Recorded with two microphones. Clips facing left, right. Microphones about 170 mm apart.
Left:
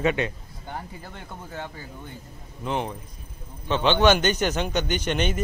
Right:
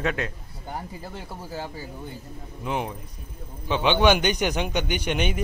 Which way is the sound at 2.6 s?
10° right (ahead or behind).